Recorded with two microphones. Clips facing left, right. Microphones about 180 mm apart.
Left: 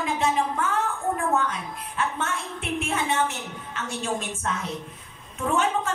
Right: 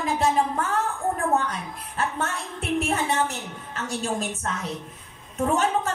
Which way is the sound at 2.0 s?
40° right (ahead or behind).